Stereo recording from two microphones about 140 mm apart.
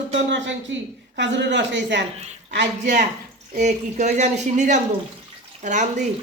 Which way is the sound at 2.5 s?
60° right (ahead or behind).